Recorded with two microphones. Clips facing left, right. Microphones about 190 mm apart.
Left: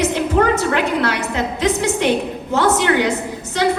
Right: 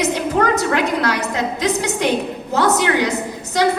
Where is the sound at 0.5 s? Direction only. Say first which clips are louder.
Even; 40° right (ahead or behind).